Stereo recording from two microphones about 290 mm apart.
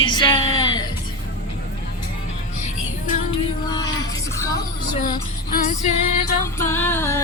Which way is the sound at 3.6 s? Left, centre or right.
Centre.